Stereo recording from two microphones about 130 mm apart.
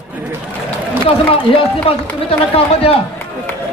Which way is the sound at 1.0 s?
45° left (ahead or behind).